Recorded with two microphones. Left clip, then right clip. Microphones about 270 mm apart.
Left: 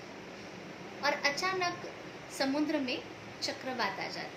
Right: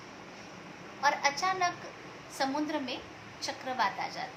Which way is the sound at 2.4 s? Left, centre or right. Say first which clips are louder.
Right 1 dB; centre.